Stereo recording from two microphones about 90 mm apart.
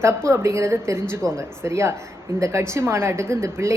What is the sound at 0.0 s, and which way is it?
Speech, 30° right (ahead or behind).